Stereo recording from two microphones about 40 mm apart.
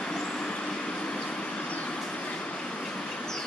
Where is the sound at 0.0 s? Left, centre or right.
Left.